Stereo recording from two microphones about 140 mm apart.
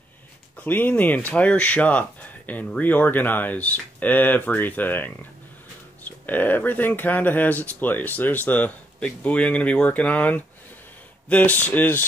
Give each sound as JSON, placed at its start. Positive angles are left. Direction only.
{"t": 0.7, "sound": "speech", "side_deg": 15}